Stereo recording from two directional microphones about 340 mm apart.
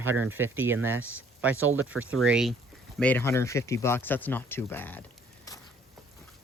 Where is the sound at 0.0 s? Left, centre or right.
Right.